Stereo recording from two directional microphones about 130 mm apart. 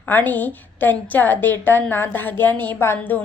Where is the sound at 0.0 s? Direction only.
15° left (ahead or behind).